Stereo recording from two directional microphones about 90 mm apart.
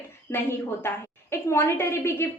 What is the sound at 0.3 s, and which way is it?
A woman's voice, 20° left (ahead or behind).